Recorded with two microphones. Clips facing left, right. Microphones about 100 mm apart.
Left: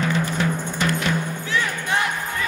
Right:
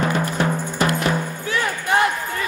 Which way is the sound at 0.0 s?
50° right (ahead or behind).